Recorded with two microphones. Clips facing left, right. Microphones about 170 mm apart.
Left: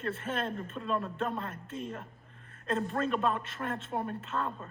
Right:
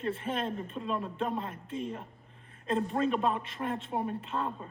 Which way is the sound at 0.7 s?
5° right (ahead or behind).